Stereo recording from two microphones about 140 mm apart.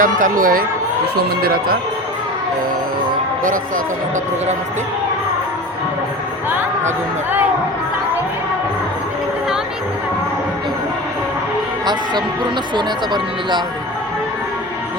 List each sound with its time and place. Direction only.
0.0 s speech: 70° right (ahead or behind); by 1.8 s 90° right